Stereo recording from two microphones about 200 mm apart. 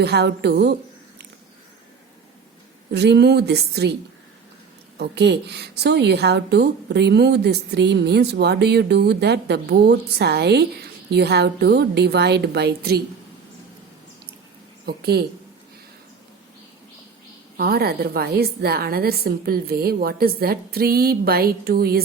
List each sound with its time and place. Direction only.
0.0 s a woman's voice: 55° right (ahead or behind)
2.9 s a woman's voice: 55° right (ahead or behind)
4.9 s a woman's voice: 55° right (ahead or behind)
14.8 s a woman's voice: 55° right (ahead or behind)
17.6 s a woman's voice: 50° right (ahead or behind)